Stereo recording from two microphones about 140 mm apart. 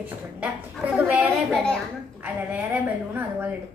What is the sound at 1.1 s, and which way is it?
Speech, centre (ahead or behind).